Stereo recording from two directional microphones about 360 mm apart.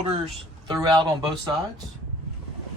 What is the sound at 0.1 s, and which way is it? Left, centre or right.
Speech, centre.